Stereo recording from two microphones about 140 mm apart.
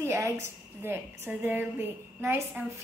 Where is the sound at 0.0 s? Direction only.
20° right (ahead or behind).